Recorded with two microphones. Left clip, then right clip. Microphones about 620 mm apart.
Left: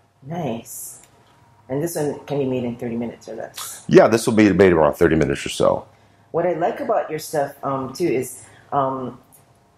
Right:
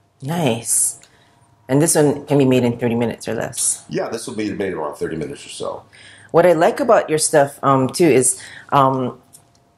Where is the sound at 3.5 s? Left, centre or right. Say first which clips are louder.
Left 10 dB; left.